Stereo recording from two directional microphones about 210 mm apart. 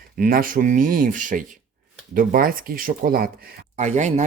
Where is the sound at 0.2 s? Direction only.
40° right (ahead or behind).